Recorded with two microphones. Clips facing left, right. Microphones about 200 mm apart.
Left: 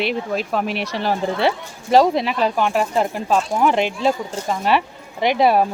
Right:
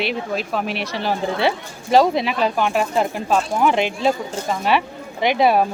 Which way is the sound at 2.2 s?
40° left (ahead or behind).